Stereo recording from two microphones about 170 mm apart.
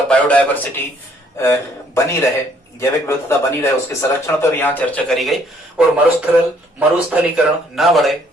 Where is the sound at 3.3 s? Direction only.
15° left (ahead or behind).